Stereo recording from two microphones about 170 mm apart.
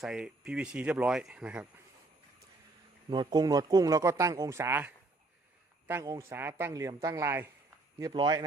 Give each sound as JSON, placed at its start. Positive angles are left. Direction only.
{"t": 0.0, "sound": "speech", "side_deg": -5}
{"t": 3.1, "sound": "speech", "side_deg": -25}
{"t": 5.9, "sound": "speech", "side_deg": -15}